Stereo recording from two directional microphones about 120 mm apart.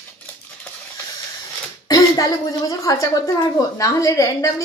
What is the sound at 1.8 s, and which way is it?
A woman's voice, 30° left (ahead or behind).